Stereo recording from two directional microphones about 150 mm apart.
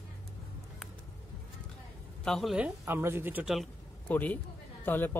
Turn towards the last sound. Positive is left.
turn(degrees=15)  # may be behind; listen again after turning